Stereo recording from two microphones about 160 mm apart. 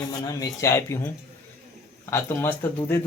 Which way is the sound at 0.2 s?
25° left (ahead or behind).